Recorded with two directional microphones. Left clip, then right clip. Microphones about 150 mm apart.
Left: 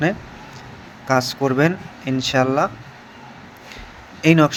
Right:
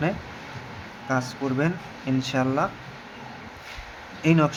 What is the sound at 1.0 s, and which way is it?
Speech, 45° left (ahead or behind).